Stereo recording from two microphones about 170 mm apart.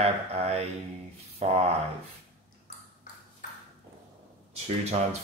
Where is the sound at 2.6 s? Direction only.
55° left (ahead or behind).